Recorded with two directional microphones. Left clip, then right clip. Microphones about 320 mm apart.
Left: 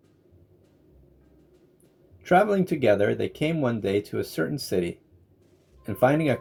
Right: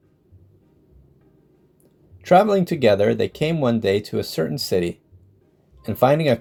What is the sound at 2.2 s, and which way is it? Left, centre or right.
Speech, right.